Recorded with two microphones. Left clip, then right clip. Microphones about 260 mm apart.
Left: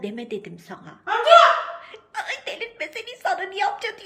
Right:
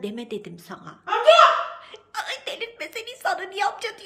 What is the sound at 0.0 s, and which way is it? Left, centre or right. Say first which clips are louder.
A woman's voice: left 1 dB; centre.